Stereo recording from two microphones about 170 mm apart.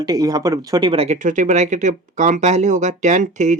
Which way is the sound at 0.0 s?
20° right (ahead or behind).